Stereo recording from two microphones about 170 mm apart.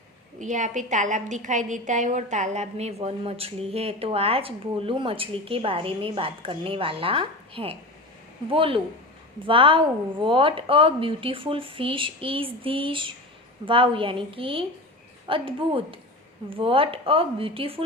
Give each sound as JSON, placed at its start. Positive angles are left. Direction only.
{"t": 0.3, "sound": "a woman's voice", "side_deg": -45}